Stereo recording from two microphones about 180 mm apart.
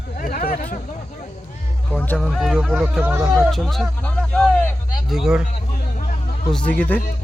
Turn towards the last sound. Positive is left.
turn(degrees=10)  # may be behind; listen again after turning